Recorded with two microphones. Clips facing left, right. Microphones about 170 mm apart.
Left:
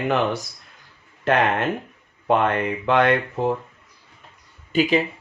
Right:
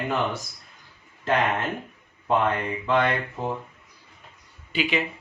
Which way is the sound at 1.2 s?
70° left (ahead or behind).